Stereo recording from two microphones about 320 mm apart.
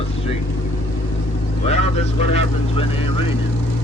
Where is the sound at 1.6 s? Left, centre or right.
Centre.